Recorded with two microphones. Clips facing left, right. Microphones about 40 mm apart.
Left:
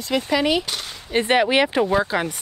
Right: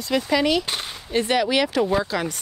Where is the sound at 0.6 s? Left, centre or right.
Right.